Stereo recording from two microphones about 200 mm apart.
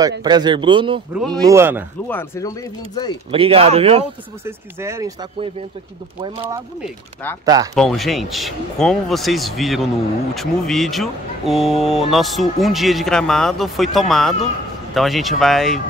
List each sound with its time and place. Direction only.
0.2 s a man's voice: 20° right (ahead or behind)
1.1 s speech: 5° left (ahead or behind)
1.4 s speech: 15° right (ahead or behind)
2.0 s speech: 10° left (ahead or behind)
3.3 s a man's voice: 30° right (ahead or behind)
4.5 s speech: 15° right (ahead or behind)
7.4 s a man's voice: 20° right (ahead or behind)
7.7 s speech: centre (ahead or behind)